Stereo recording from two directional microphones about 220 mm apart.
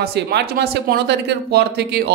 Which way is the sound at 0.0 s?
50° right (ahead or behind).